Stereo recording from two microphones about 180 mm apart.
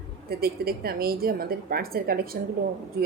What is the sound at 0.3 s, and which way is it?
A woman's voice, 60° right (ahead or behind).